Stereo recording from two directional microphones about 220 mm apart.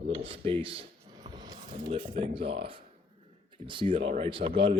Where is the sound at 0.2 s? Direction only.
25° right (ahead or behind).